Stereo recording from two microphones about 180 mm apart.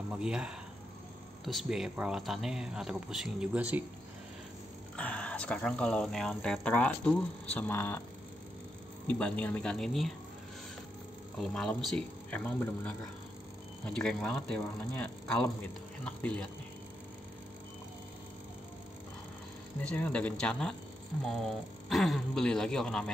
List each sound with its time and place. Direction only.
0.1 s speech: 5° right (ahead or behind)
4.9 s speech: 5° left (ahead or behind)
9.0 s speech: 10° left (ahead or behind)
11.3 s speech: centre (ahead or behind)
19.8 s speech: 5° left (ahead or behind)